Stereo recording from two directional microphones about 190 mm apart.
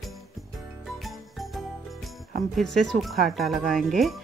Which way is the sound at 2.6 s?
Centre (ahead or behind).